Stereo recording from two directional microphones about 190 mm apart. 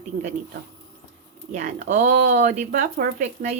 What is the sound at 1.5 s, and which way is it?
Speech, 40° right (ahead or behind).